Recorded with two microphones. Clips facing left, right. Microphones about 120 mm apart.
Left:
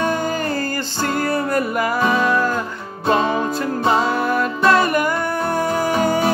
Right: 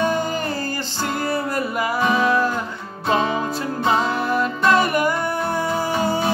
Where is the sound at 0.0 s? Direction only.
25° right (ahead or behind).